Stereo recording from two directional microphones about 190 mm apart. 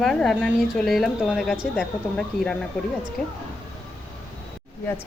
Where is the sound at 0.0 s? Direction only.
Centre (ahead or behind).